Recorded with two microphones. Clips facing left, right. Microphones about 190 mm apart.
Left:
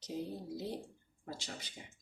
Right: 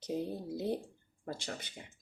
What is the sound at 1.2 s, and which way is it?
Speech, 55° right (ahead or behind).